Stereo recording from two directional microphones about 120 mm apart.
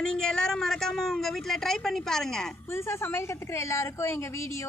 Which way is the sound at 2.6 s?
20° left (ahead or behind).